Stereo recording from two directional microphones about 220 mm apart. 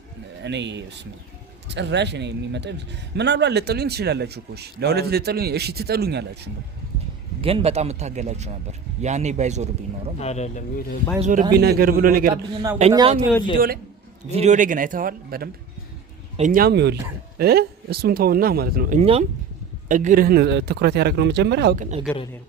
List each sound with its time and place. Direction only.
0.4 s speech: 50° right (ahead or behind)
7.4 s speech: 25° right (ahead or behind)
10.2 s speech: 30° left (ahead or behind)
11.2 s speech: 35° right (ahead or behind)
11.5 s speech: 45° right (ahead or behind)
12.9 s speech: 25° right (ahead or behind)
14.3 s speech: 30° right (ahead or behind)
18.9 s speech: 25° right (ahead or behind); by 21.8 s 50° right (ahead or behind)
22.1 s a man's voice: 5° left (ahead or behind)